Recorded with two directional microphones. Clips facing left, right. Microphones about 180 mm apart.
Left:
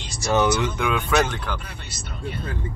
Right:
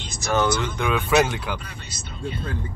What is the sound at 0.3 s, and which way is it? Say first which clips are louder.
Speech: left 2 dB; 15° left (ahead or behind).